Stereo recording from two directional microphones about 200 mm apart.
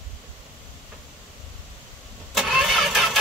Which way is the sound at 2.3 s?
Centre (ahead or behind).